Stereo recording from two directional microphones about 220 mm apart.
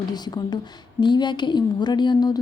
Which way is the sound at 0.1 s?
20° left (ahead or behind).